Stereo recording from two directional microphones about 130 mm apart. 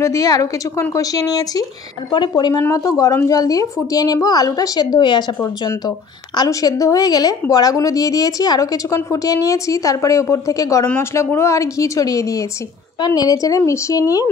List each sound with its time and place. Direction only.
0.0 s a woman's voice: 25° left (ahead or behind)
2.6 s a woman's voice: 25° left (ahead or behind)
10.9 s a woman's voice: 15° left (ahead or behind)